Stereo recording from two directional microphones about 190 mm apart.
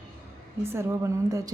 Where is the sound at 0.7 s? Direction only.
15° right (ahead or behind).